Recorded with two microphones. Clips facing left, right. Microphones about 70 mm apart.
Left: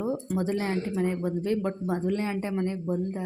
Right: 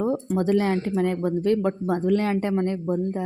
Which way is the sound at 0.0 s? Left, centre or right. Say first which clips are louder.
Right 5 dB; right.